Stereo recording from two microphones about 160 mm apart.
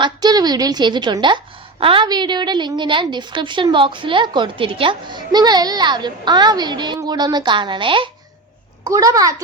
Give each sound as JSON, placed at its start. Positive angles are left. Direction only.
{"t": 0.0, "sound": "a woman's voice", "side_deg": -25}